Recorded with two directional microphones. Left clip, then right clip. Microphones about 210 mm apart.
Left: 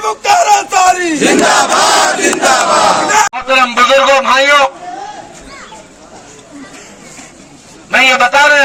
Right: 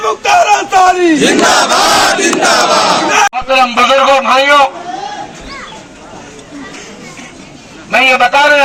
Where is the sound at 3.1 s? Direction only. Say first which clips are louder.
Right 1 dB; 10° left (ahead or behind).